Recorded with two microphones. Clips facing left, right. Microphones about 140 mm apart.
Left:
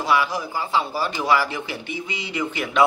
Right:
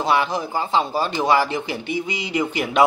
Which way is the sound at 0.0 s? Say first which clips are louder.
Right 2 dB; 25° right (ahead or behind).